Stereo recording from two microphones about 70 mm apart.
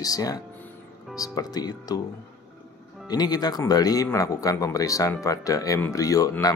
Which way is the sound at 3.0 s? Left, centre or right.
Left.